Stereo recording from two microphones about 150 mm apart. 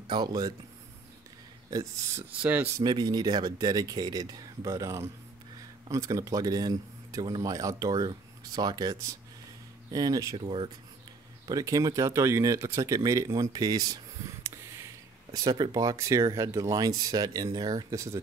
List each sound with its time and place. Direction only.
0.1 s a man's voice: 30° right (ahead or behind)
1.7 s a man's voice: 25° right (ahead or behind)
2.4 s speech: 10° right (ahead or behind)
2.8 s a man's voice: 30° right (ahead or behind)
10.4 s speech: 35° right (ahead or behind)
11.4 s a man's voice: 25° right (ahead or behind)
14.4 s a sound: 20° right (ahead or behind)
15.3 s a man's voice: 25° right (ahead or behind)